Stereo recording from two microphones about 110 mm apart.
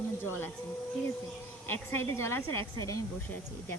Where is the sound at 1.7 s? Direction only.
20° left (ahead or behind).